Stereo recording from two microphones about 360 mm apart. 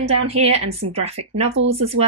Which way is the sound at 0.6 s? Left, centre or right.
Right.